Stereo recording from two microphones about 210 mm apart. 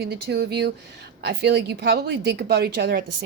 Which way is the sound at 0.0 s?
55° right (ahead or behind).